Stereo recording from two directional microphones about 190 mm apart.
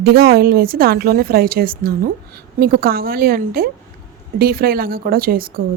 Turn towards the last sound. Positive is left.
turn(degrees=-50)  # may be behind; listen again after turning